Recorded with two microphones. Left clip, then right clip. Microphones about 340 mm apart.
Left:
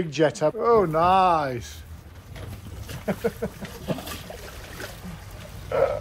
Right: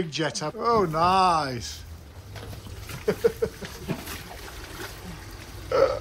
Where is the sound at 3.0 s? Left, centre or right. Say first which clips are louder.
Right 4 dB; centre.